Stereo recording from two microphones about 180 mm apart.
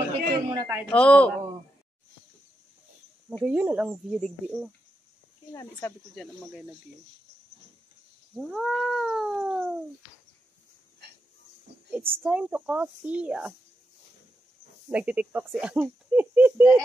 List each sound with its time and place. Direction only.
0.5 s a woman's voice: 15° right (ahead or behind)
0.8 s a woman's voice: 5° left (ahead or behind)
3.4 s cat: 10° right (ahead or behind)
5.5 s a woman's voice: 15° left (ahead or behind)
8.4 s cat: centre (ahead or behind)
11.9 s speech: 10° right (ahead or behind)
14.9 s speech: 5° right (ahead or behind)